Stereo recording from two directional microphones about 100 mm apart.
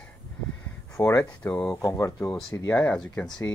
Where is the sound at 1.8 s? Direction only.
30° left (ahead or behind).